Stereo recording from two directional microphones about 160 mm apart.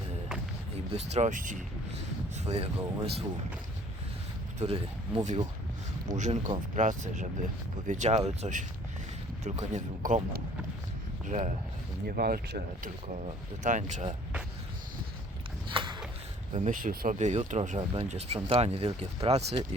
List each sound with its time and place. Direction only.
0.9 s speech: 45° right (ahead or behind)
2.3 s speech: 40° right (ahead or behind)
4.6 s speech: 40° right (ahead or behind)
6.1 s speech: 50° right (ahead or behind)
11.3 s speech: 50° right (ahead or behind)
12.0 s speech: 70° right (ahead or behind); by 14.2 s 45° right (ahead or behind)
15.7 s a sound: 30° right (ahead or behind)
16.6 s speech: 60° right (ahead or behind)
17.2 s speech: 45° right (ahead or behind)